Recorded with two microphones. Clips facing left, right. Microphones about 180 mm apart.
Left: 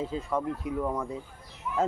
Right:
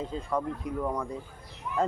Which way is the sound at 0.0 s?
5° left (ahead or behind).